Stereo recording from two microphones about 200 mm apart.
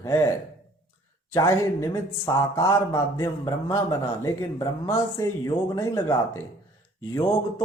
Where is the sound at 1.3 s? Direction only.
15° left (ahead or behind).